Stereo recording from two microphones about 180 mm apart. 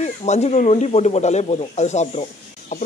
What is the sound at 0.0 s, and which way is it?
Speech, 40° left (ahead or behind).